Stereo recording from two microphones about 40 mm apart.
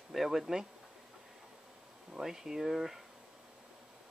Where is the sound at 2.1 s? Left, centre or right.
Centre.